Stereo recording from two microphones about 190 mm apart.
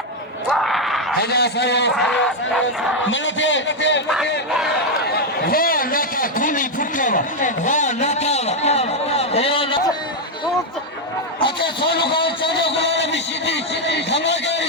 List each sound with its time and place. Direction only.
0.5 s a sound: centre (ahead or behind)
1.2 s a man's voice: 60° left (ahead or behind)
2.0 s speech: 5° left (ahead or behind)
3.0 s a man's voice: 80° left
5.1 s a sound: 50° left (ahead or behind); by 9.9 s 25° left (ahead or behind)
11.3 s a sound: 25° left (ahead or behind)
11.9 s a man's voice: 60° left (ahead or behind)
12.1 s a man's voice: 25° left (ahead or behind)
12.5 s a man's voice: 65° left (ahead or behind)